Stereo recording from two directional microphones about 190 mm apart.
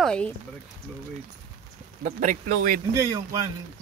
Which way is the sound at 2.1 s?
45° right (ahead or behind).